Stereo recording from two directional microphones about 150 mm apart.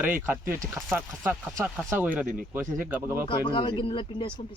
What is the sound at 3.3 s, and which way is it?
Speech, 35° left (ahead or behind).